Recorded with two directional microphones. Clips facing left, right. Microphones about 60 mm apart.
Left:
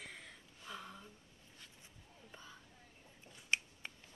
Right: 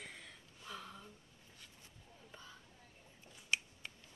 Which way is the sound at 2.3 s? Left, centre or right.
Centre.